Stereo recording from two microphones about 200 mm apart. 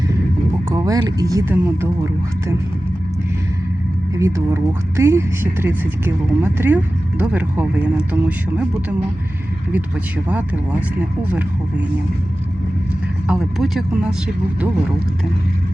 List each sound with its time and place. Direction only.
0.7 s speech: 20° right (ahead or behind)
4.1 s speech: 15° right (ahead or behind)
10.2 s speech: 5° right (ahead or behind)
13.2 s speech: 5° right (ahead or behind)